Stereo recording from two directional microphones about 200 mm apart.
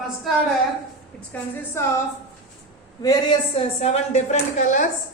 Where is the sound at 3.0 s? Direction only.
20° left (ahead or behind); by 4.8 s 35° left (ahead or behind).